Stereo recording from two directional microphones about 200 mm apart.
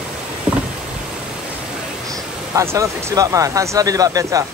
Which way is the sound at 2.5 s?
15° right (ahead or behind).